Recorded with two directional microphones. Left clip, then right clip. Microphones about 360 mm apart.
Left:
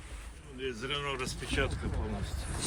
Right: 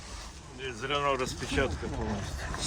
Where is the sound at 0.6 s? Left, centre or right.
Right.